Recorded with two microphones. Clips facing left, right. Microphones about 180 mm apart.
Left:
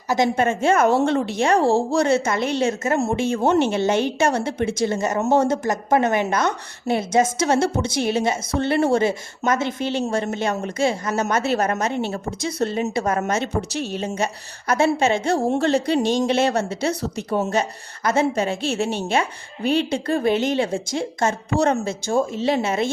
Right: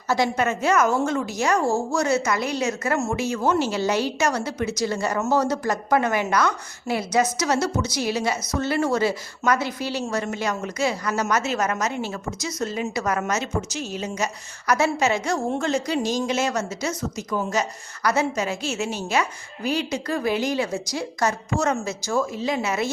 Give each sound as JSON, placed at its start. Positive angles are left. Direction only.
{"t": 0.1, "sound": "a woman's voice", "side_deg": 25}
{"t": 13.7, "sound": "speech", "side_deg": 65}
{"t": 14.7, "sound": "a woman's voice", "side_deg": 30}